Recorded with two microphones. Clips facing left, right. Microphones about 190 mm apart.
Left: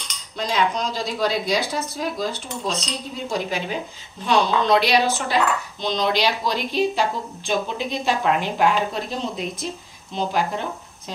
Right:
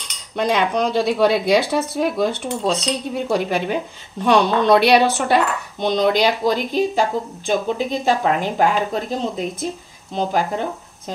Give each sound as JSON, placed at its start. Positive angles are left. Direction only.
{"t": 0.4, "sound": "speech", "side_deg": -60}